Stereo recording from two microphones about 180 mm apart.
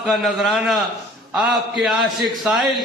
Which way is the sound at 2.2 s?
Centre (ahead or behind).